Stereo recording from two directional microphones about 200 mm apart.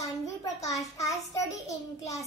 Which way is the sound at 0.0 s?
15° left (ahead or behind).